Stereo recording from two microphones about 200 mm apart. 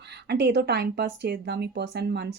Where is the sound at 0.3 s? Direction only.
55° right (ahead or behind).